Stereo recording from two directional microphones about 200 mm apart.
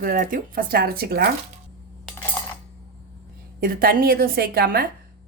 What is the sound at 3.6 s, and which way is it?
Speech, 45° right (ahead or behind).